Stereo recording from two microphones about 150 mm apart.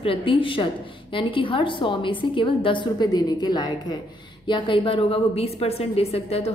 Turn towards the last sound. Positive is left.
turn(degrees=40)  # may be behind; listen again after turning